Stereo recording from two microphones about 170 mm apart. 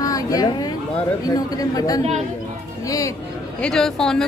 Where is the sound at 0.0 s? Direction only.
20° left (ahead or behind).